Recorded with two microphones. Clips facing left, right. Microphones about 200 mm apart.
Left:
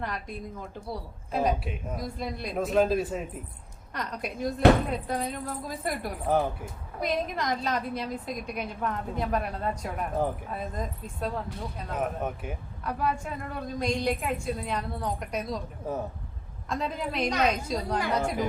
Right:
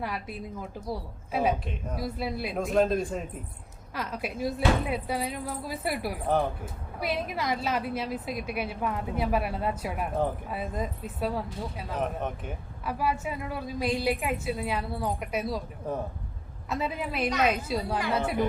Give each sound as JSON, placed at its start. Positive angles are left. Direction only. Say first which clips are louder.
{"t": 0.0, "sound": "a woman's voice", "louder": "right 1 dB", "side_deg": -5}
{"t": 1.6, "sound": "a woman's voice", "louder": "left 1 dB", "side_deg": 5}
{"t": 2.0, "sound": "a woman's voice", "louder": "right 6 dB", "side_deg": -5}
{"t": 11.9, "sound": "speech", "louder": "left 1 dB", "side_deg": 5}
{"t": 12.8, "sound": "a woman's voice", "louder": "right 1 dB", "side_deg": -5}
{"t": 15.9, "sound": "a woman's voice", "louder": "even", "side_deg": 5}
{"t": 16.6, "sound": "a woman's voice", "louder": "even", "side_deg": -5}